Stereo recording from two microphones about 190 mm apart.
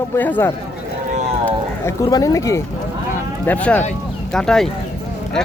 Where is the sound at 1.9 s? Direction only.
20° left (ahead or behind).